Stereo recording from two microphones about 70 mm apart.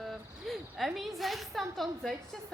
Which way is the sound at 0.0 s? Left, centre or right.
Centre.